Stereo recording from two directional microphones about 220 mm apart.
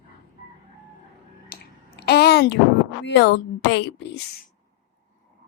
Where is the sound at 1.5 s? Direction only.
40° left (ahead or behind).